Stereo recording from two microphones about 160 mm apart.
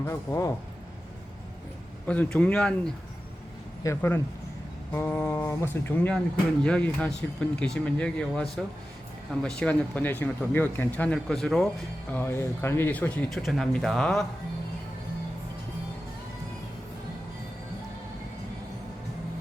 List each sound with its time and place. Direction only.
0.0 s speech: 15° left (ahead or behind)
2.0 s speech: 10° left (ahead or behind)
3.8 s speech: 15° left (ahead or behind)
12.1 s speech: 15° left (ahead or behind)